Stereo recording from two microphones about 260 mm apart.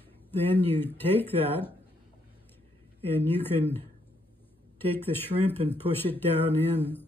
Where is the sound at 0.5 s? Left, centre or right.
Centre.